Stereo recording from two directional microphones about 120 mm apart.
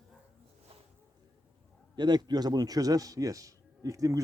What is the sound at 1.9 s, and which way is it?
A man's voice, 35° right (ahead or behind).